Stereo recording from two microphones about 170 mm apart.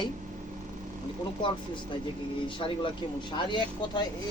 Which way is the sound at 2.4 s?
30° left (ahead or behind).